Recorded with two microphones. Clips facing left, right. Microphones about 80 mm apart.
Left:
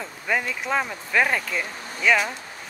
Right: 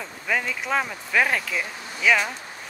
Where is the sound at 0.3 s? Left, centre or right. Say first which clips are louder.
Even; centre.